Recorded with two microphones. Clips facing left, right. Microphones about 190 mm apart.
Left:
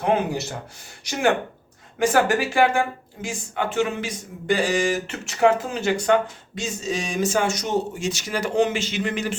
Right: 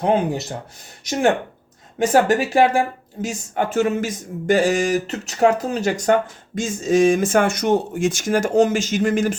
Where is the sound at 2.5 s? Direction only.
35° right (ahead or behind).